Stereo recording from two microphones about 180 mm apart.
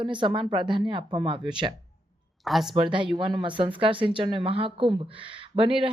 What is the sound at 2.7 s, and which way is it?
Speech, 25° right (ahead or behind).